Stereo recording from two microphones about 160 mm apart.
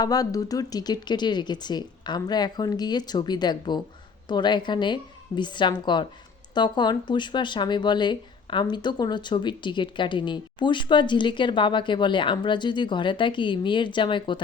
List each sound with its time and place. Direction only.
0.0 s speech: 25° left (ahead or behind)